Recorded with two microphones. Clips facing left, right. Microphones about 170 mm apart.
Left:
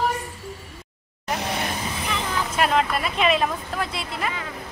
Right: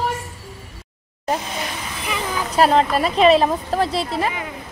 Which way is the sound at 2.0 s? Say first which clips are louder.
Right 4 dB; 10° right (ahead or behind).